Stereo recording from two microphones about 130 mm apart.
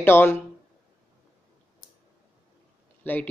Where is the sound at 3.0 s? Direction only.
15° left (ahead or behind).